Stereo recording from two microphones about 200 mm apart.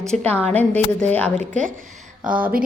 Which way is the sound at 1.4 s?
40° right (ahead or behind).